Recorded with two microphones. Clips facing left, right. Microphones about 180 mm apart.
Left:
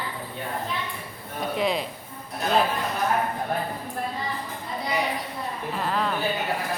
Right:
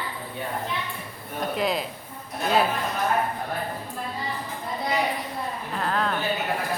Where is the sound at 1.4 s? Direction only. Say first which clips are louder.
Even; centre (ahead or behind).